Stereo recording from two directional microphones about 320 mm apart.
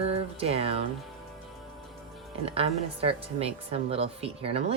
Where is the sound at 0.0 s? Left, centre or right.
Centre.